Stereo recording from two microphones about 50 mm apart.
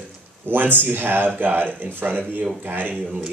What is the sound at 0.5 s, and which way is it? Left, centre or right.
Speech, right.